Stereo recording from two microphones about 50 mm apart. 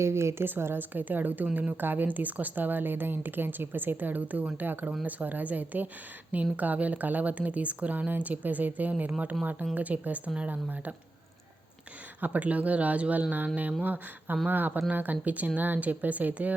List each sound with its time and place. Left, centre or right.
0.0 s a woman's voice: right
0.4 s speech: right
12.2 s speech: right